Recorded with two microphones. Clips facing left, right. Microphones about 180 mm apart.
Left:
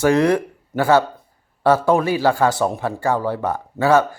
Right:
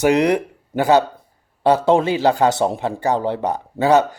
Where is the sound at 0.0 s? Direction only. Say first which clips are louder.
Even; 15° right (ahead or behind).